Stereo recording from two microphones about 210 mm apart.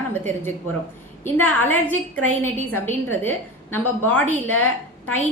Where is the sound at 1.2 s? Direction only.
10° left (ahead or behind).